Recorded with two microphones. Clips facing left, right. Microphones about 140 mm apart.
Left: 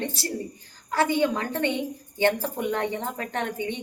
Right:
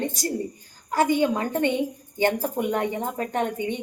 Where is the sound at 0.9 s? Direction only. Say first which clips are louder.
Right 2 dB; 15° right (ahead or behind).